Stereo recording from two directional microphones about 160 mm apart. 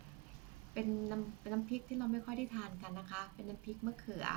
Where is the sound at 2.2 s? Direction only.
5° right (ahead or behind).